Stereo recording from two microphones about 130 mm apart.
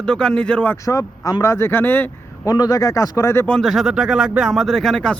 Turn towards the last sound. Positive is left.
turn(degrees=5)  # may be behind; listen again after turning